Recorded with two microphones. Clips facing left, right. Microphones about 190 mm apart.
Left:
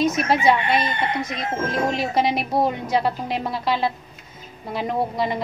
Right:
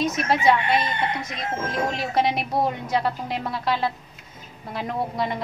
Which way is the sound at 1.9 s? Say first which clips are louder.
Left 1 dB; centre (ahead or behind).